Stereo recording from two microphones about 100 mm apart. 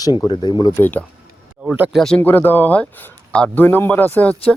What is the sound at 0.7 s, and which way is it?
Speech, 20° left (ahead or behind).